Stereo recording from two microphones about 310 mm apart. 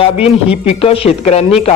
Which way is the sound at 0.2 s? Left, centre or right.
Centre.